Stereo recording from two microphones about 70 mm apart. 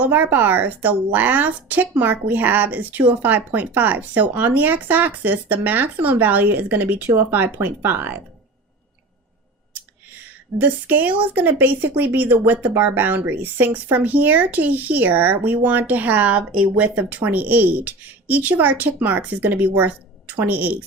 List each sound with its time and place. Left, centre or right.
0.0 s speech: right
10.6 s speech: right